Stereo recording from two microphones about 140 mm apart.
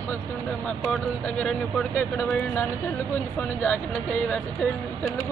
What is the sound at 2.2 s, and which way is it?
Speech, 15° left (ahead or behind).